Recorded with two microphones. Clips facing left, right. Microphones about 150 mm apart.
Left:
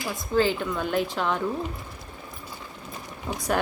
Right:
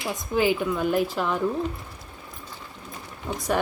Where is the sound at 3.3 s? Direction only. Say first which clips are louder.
Right 1 dB; centre (ahead or behind).